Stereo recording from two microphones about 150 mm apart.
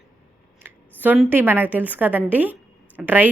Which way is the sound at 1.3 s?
15° right (ahead or behind).